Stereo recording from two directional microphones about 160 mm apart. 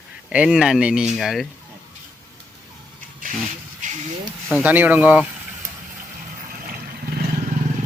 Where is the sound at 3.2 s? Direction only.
60° right (ahead or behind).